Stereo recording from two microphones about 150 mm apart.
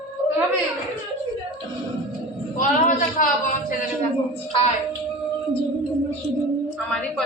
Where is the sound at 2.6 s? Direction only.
65° left (ahead or behind).